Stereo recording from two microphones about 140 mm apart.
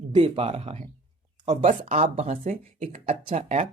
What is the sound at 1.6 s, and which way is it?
Speech, 60° right (ahead or behind).